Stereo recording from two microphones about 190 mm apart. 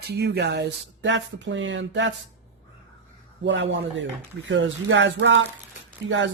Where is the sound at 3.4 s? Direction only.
70° right (ahead or behind).